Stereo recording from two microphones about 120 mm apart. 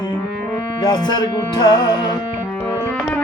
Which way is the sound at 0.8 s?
35° left (ahead or behind).